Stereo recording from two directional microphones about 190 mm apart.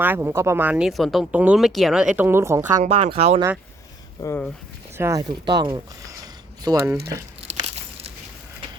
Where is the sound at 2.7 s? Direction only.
35° right (ahead or behind).